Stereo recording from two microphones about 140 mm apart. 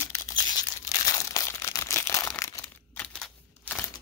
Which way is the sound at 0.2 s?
30° left (ahead or behind).